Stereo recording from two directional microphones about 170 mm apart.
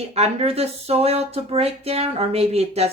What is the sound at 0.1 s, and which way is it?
Speech, 35° right (ahead or behind).